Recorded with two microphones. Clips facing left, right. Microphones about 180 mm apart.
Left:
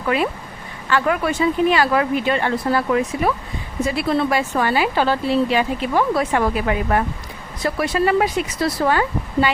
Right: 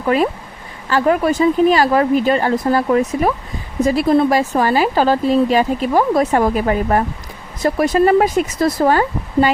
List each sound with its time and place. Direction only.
0.0 s speech: 40° right (ahead or behind)